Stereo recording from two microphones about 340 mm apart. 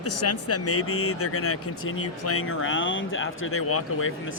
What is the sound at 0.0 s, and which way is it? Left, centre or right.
Speech, left.